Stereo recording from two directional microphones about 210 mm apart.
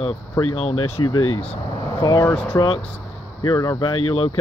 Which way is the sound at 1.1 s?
85° left.